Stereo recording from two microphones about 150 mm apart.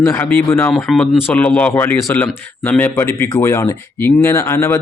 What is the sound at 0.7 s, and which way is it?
Speech, centre (ahead or behind).